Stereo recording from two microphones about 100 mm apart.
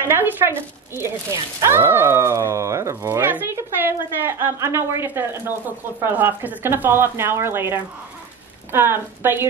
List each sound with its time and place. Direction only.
0.0 s speech: 20° right (ahead or behind)